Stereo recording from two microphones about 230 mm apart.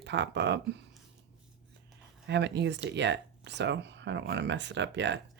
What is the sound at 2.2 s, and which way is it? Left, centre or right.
Speech, right.